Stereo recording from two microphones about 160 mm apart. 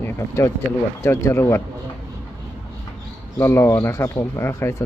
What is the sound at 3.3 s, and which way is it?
Speech, 15° left (ahead or behind).